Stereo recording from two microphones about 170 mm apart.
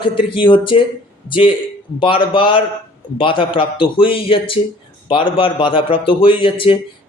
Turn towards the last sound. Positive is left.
turn(degrees=30)  # may be behind; listen again after turning